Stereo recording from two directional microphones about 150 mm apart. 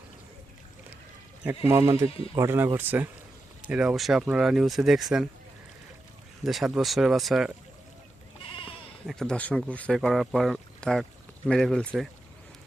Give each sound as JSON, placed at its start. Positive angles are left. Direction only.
{"t": 1.5, "sound": "speech", "side_deg": -15}
{"t": 6.4, "sound": "speech", "side_deg": 0}
{"t": 9.0, "sound": "speech", "side_deg": 5}